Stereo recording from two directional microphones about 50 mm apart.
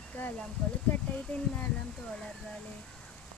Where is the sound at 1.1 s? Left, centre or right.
Left.